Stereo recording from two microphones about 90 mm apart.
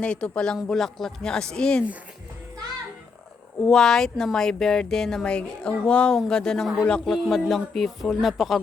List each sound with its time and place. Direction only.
0.0 s speech: 10° left (ahead or behind)
3.7 s speech: 5° left (ahead or behind)